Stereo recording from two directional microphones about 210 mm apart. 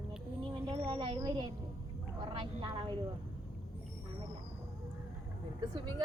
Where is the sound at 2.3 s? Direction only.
25° right (ahead or behind).